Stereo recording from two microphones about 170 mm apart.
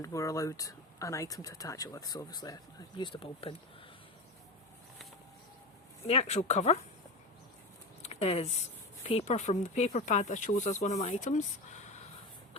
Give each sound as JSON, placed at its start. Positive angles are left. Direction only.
{"t": 0.0, "sound": "speech", "side_deg": 20}
{"t": 6.1, "sound": "speech", "side_deg": 40}
{"t": 8.0, "sound": "speech", "side_deg": 40}